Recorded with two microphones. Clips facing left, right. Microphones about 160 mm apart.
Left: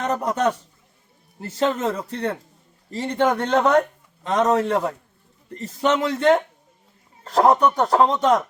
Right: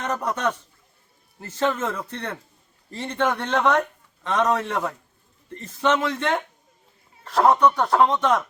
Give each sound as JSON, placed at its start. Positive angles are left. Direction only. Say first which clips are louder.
{"t": 0.0, "sound": "a man's voice", "louder": "left 4 dB", "side_deg": 35}
{"t": 6.1, "sound": "a man's voice", "louder": "left 8 dB", "side_deg": 40}